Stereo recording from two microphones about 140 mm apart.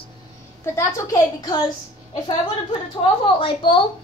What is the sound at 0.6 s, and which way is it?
A woman's voice, 20° left (ahead or behind).